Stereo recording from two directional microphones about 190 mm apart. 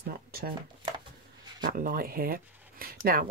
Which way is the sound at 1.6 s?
50° right (ahead or behind).